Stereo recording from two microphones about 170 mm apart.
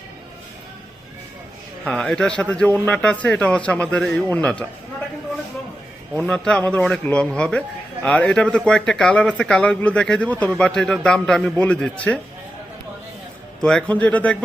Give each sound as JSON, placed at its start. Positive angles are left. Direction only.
{"t": 1.8, "sound": "speech", "side_deg": 5}
{"t": 6.1, "sound": "speech", "side_deg": 5}
{"t": 13.6, "sound": "speech", "side_deg": 5}